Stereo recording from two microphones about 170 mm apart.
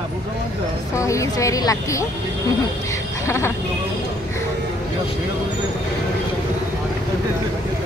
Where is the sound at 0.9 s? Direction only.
20° left (ahead or behind).